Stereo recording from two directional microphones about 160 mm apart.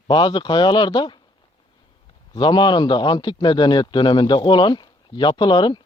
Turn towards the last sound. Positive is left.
turn(degrees=30)  # may be behind; listen again after turning